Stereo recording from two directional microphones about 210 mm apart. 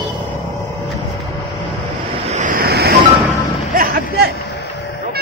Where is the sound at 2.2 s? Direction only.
35° right (ahead or behind).